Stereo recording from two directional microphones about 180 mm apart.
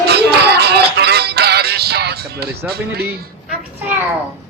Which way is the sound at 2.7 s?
60° right (ahead or behind).